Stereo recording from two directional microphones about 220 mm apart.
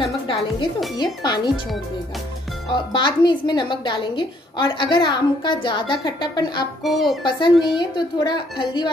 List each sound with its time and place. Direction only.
0.0 s music: 20° left (ahead or behind)
0.9 s a woman's voice: 20° left (ahead or behind)
2.7 s a woman's voice: 20° left (ahead or behind)
6.8 s speech: centre (ahead or behind)
7.2 s a woman's voice: 20° left (ahead or behind)